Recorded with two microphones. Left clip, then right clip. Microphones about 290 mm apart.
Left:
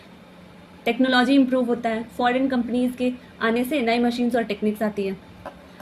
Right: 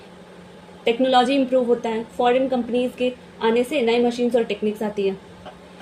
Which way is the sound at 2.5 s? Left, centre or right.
Left.